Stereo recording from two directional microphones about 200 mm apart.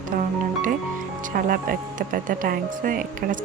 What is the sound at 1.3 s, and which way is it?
Speech, 45° right (ahead or behind).